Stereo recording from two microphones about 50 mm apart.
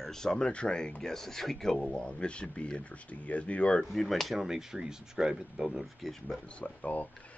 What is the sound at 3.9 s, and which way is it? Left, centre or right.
Speech, centre.